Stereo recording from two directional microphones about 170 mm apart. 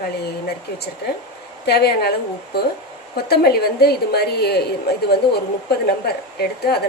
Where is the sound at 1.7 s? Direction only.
70° left (ahead or behind).